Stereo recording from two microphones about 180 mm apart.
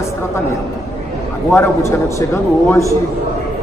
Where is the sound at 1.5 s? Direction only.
15° left (ahead or behind).